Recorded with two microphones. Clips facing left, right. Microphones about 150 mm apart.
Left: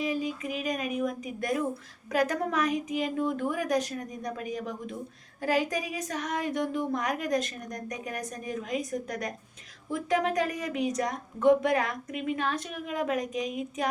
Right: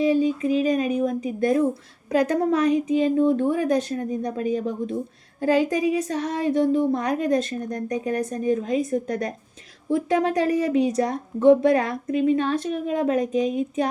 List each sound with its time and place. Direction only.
0.0 s a woman's voice: 30° right (ahead or behind)